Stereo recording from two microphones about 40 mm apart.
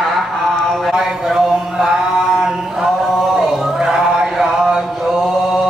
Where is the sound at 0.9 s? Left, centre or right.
Centre.